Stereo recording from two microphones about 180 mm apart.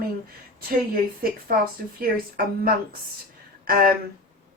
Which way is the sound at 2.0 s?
55° right (ahead or behind).